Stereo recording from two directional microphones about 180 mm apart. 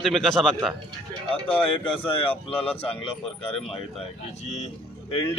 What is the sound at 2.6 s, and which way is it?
Speech, 30° left (ahead or behind).